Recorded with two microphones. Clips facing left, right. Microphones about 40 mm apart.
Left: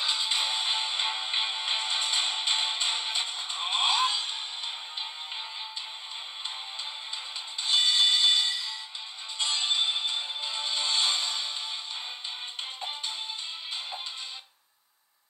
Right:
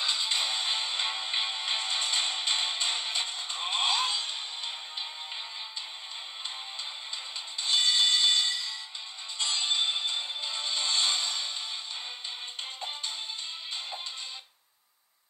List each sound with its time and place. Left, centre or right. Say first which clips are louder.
0.0 s music: left 1 dB; centre
7.6 s music: left 1 dB; centre